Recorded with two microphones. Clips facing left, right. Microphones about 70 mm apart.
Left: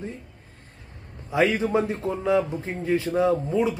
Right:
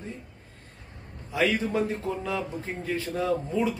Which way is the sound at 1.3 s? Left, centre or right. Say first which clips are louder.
Left 4 dB; left.